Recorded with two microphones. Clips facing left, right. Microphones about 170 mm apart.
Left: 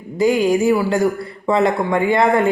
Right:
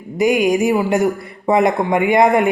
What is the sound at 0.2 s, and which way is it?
Speech, 15° right (ahead or behind).